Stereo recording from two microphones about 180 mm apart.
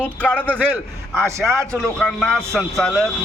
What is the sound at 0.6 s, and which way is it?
A man's voice, 10° right (ahead or behind).